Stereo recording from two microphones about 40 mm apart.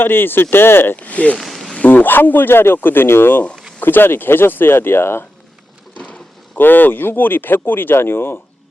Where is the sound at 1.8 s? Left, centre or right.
Left.